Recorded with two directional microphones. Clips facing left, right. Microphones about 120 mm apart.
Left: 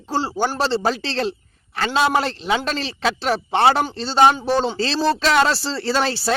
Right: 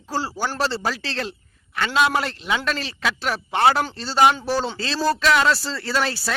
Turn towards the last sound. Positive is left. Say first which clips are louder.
# left 4 dB
turn(degrees=30)  # may be behind; listen again after turning